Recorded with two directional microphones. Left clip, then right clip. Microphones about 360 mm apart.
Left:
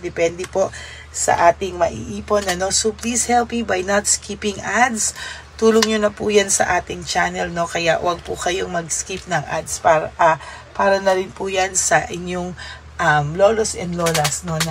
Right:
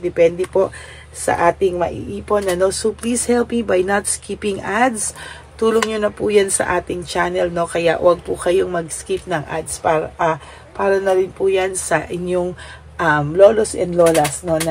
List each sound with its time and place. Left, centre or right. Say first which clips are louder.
0.0 s speech: right 5 dB; centre